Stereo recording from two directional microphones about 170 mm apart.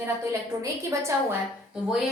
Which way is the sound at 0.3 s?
20° right (ahead or behind).